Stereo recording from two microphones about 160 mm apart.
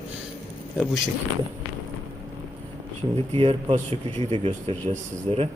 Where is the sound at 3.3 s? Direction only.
35° right (ahead or behind).